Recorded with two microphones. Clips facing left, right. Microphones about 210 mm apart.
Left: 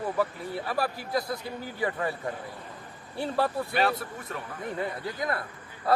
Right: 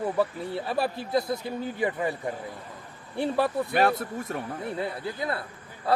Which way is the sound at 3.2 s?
15° right (ahead or behind).